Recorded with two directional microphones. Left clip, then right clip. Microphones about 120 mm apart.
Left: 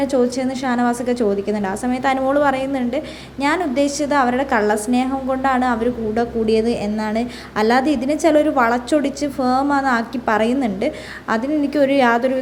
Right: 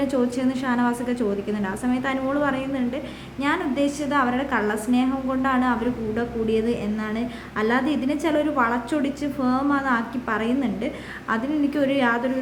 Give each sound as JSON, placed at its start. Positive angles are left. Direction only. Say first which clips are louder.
{"t": 0.0, "sound": "a woman's voice", "louder": "left 5 dB", "side_deg": 25}